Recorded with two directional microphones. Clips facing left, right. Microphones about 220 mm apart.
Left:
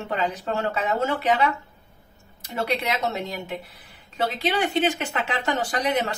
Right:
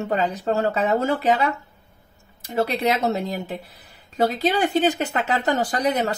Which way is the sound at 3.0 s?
35° right (ahead or behind).